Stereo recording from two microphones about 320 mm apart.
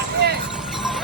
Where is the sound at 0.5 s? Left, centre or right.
Centre.